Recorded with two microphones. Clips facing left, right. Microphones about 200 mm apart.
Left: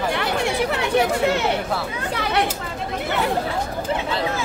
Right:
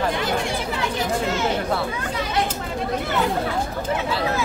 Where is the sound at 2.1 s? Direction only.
65° left (ahead or behind).